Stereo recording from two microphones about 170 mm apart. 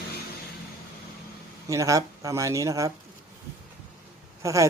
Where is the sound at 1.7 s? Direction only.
20° right (ahead or behind).